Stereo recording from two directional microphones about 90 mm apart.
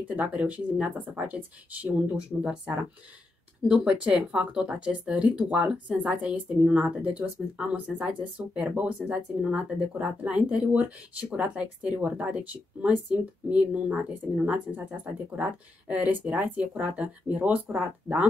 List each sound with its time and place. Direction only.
0.1 s speech: 15° right (ahead or behind)